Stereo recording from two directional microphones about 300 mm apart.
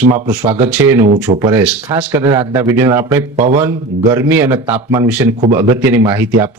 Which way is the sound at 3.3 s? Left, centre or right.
Right.